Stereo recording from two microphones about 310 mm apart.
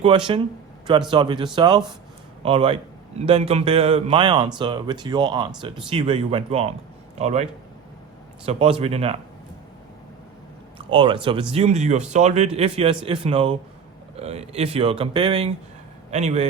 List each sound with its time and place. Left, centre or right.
0.3 s a man's voice: centre
10.8 s a man's voice: centre